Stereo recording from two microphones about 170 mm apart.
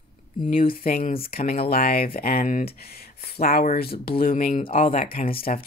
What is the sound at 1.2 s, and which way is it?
Speech, 60° left (ahead or behind).